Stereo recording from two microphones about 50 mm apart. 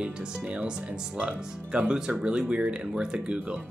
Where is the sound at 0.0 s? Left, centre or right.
Centre.